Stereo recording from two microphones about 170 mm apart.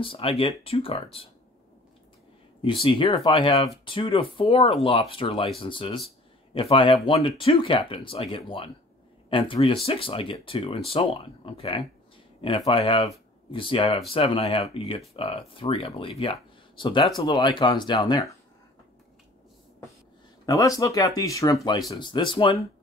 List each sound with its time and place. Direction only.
0.0 s speech: 30° left (ahead or behind)
2.8 s speech: 30° left (ahead or behind)
20.4 s speech: 20° left (ahead or behind)